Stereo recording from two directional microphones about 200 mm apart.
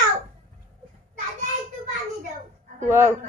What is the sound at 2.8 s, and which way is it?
Speech, 10° right (ahead or behind).